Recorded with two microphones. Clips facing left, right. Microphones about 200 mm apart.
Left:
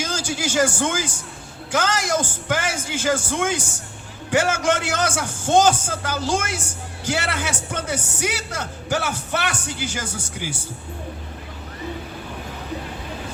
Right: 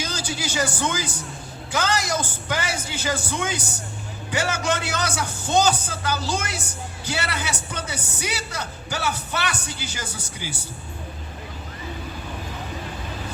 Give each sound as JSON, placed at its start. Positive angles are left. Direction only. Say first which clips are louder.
{"t": 0.0, "sound": "a man's voice", "louder": "left 3 dB", "side_deg": 50}